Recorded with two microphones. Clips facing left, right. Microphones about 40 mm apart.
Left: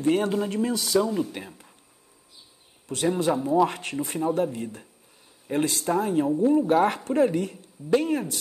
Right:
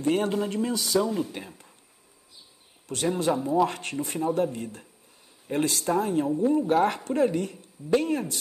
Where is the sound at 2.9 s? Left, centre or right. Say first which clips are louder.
Left 2 dB; centre.